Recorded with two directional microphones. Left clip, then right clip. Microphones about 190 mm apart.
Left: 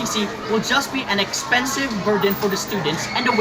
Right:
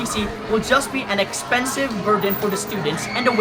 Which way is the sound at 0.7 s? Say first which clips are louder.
Right 2 dB; 15° right (ahead or behind).